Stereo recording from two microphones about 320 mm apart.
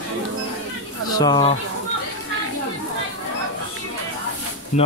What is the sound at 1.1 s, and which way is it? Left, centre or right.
Speech, centre.